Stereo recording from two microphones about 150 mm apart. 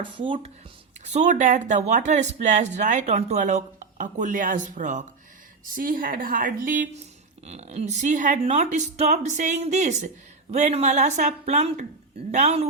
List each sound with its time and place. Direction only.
0.0 s speech: 35° right (ahead or behind)
1.0 s speech: 50° right (ahead or behind)
5.6 s a woman's voice: 70° right (ahead or behind)
7.4 s speech: 45° right (ahead or behind)